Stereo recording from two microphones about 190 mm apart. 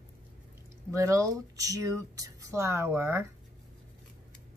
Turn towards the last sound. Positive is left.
turn(degrees=-10)  # may be behind; listen again after turning